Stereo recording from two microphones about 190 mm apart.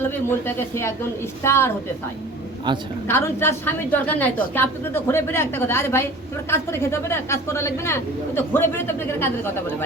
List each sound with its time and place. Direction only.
0.0 s a man's voice: 10° left (ahead or behind)
2.7 s a woman's voice: 25° right (ahead or behind)
3.1 s a man's voice: 10° left (ahead or behind)